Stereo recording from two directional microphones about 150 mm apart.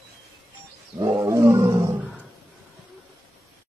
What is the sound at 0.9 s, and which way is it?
Roaring cats, 20° right (ahead or behind).